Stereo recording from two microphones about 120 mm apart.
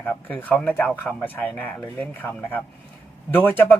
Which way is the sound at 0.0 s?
10° left (ahead or behind).